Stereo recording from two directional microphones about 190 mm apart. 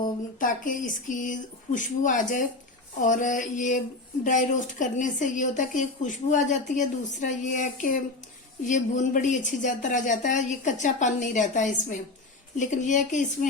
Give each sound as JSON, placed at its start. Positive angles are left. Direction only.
{"t": 0.0, "sound": "speech", "side_deg": 45}